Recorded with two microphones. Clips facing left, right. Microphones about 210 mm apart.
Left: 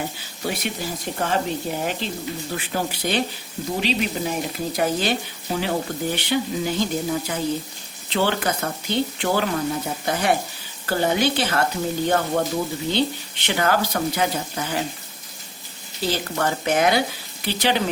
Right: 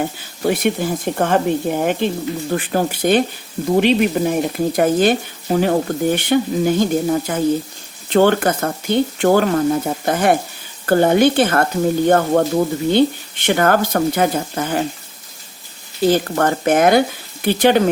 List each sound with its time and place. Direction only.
0.4 s speech: 55° right (ahead or behind)
16.0 s speech: 50° right (ahead or behind)